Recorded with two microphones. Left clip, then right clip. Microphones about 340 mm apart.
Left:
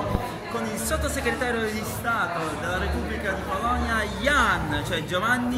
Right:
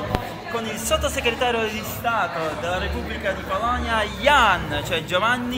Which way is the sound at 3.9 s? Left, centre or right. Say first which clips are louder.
Right 9 dB; centre.